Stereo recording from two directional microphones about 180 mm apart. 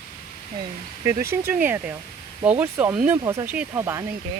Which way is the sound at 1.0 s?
15° right (ahead or behind).